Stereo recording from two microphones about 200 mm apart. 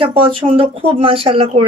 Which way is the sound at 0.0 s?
25° right (ahead or behind).